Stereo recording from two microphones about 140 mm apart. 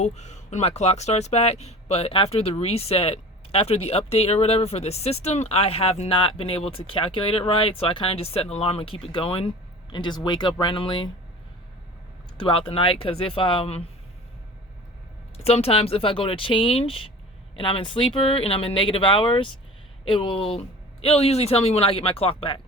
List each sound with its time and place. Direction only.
0.0 s speech: 55° left (ahead or behind); by 11.1 s 35° left (ahead or behind)
12.4 s speech: 40° left (ahead or behind)
15.4 s speech: 45° left (ahead or behind)